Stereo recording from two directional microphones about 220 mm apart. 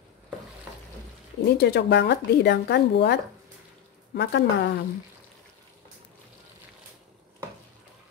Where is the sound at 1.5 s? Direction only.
50° left (ahead or behind).